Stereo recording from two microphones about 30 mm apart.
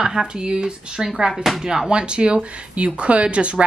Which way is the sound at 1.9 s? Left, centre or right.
Right.